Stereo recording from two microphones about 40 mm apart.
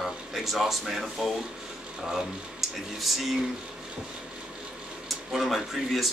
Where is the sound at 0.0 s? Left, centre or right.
Centre.